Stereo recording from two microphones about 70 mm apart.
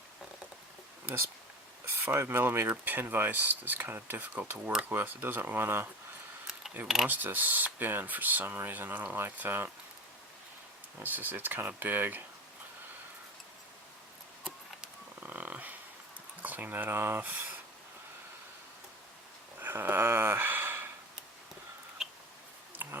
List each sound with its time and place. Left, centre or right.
1.8 s speech: right
6.8 s speech: centre
7.1 s speech: right
11.0 s speech: right
15.2 s dog: right
16.4 s speech: right
19.5 s a sound: right
22.7 s a sound: right